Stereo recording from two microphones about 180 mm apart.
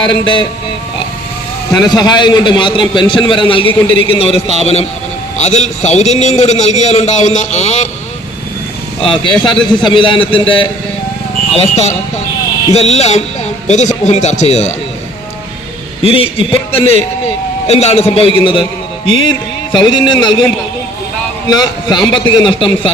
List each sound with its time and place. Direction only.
0.1 s a man's voice: 25° left (ahead or behind)
1.8 s a man's voice: 25° left (ahead or behind)
9.0 s a man's voice: 30° left (ahead or behind)
11.5 s a man's voice: 35° left (ahead or behind)
16.0 s a man's voice: 30° left (ahead or behind)
21.5 s a man's voice: 25° left (ahead or behind)